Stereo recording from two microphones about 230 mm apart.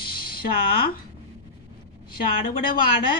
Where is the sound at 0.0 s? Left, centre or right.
Left.